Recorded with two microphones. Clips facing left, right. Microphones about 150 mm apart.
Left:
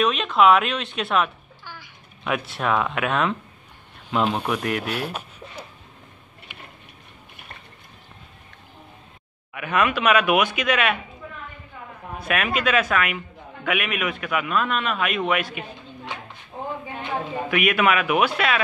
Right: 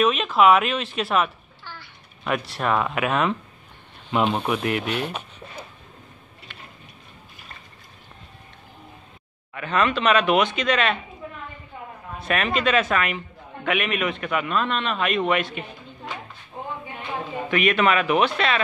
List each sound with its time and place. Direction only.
0.0 s a man's voice: centre (ahead or behind)
1.6 s babbling: 10° left (ahead or behind)
2.2 s a man's voice: centre (ahead or behind)
4.8 s speech: 10° left (ahead or behind)
6.5 s a sound: 15° left (ahead or behind)
9.5 s speech: 10° left (ahead or behind)
12.3 s a man's voice: 5° left (ahead or behind)
17.5 s speech: 5° left (ahead or behind)